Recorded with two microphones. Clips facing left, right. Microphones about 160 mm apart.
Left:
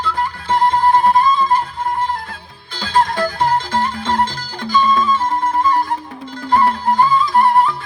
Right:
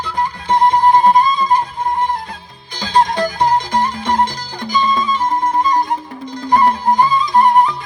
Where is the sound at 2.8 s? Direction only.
15° right (ahead or behind).